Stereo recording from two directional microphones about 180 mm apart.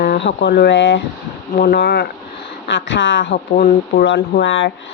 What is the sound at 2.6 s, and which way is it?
Speech, 90° left.